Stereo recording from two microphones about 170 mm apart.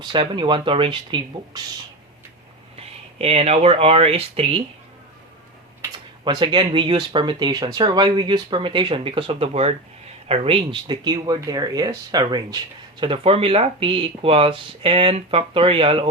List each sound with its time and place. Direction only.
0.0 s speech: 30° right (ahead or behind)
2.7 s speech: 35° right (ahead or behind)
6.2 s speech: 30° right (ahead or behind)